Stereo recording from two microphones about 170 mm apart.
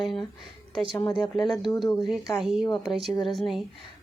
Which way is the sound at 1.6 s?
25° left (ahead or behind).